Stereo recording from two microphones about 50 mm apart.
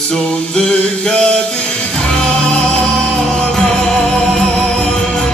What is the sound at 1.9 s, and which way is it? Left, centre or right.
Music, centre.